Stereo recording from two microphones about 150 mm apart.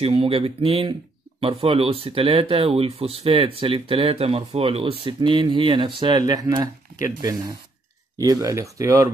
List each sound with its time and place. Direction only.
0.0 s speech: 40° right (ahead or behind); by 9.1 s 20° right (ahead or behind)